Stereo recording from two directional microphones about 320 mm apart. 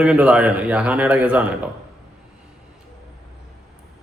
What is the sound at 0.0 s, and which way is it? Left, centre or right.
A man's voice, centre.